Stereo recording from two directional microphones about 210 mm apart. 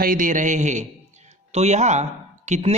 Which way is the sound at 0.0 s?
40° right (ahead or behind).